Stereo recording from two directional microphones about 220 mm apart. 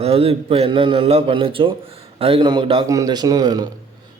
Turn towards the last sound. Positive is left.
turn(degrees=-15)  # may be behind; listen again after turning